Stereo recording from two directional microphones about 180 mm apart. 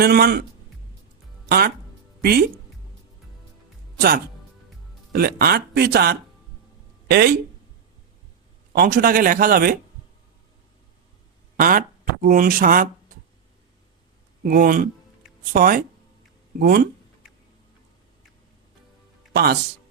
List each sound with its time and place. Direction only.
0.0 s speech: 60° right (ahead or behind)
1.5 s speech: 60° right (ahead or behind)
5.1 s speech: 60° right (ahead or behind)
8.8 s speech: 55° right (ahead or behind)
11.5 s speech: 50° right (ahead or behind)
14.4 s speech: 50° right (ahead or behind)
19.3 s speech: 60° right (ahead or behind)